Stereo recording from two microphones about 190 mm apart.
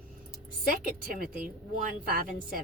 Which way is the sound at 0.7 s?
50° right (ahead or behind).